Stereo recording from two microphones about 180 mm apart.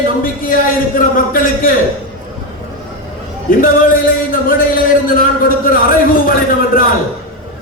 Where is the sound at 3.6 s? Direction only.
50° left (ahead or behind).